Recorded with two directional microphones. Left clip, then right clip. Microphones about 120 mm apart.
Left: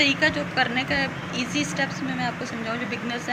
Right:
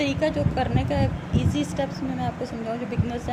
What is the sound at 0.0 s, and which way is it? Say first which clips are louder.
Speech: left 4 dB; 90° right.